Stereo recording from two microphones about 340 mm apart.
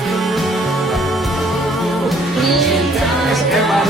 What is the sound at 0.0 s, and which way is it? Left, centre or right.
Music, centre.